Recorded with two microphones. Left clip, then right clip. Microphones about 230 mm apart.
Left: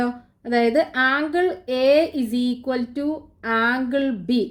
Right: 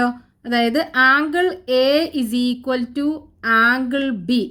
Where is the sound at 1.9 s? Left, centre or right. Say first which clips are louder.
Left 1 dB; right.